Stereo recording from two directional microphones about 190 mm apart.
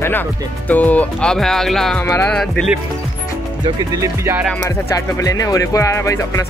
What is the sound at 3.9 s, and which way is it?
Music, 15° right (ahead or behind).